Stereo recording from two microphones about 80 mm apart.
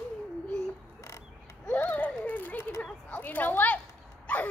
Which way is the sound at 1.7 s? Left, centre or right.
Centre.